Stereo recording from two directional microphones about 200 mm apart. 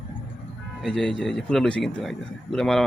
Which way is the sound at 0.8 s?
Centre (ahead or behind).